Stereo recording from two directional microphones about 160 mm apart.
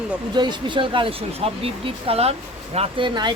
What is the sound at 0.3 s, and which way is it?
Speech, 30° right (ahead or behind).